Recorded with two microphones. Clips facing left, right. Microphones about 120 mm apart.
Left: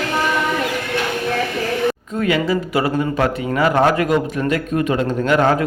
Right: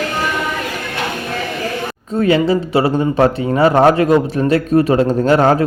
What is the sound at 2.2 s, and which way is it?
A man's voice, 30° right (ahead or behind).